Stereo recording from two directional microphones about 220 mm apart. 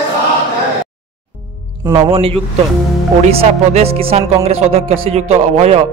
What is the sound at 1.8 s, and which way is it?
Speech, 15° right (ahead or behind).